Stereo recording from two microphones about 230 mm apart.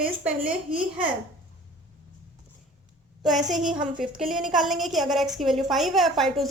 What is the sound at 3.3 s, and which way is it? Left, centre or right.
Speech, right.